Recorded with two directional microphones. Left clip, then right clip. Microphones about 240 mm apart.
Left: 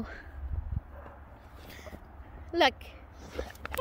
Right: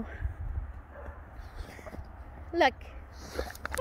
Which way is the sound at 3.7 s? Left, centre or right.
Centre.